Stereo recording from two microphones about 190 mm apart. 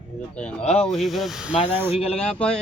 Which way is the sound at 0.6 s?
35° left (ahead or behind).